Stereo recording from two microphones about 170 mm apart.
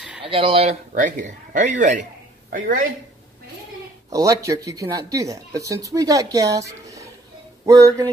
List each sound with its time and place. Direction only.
0.2 s speech: 35° right (ahead or behind)
0.9 s speech: 50° right (ahead or behind)
4.1 s a woman's voice: 20° right (ahead or behind)